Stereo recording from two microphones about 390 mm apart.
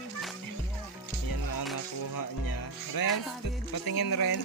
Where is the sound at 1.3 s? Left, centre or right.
Left.